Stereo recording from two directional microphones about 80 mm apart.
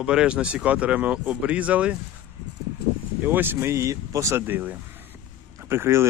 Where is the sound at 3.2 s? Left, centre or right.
Right.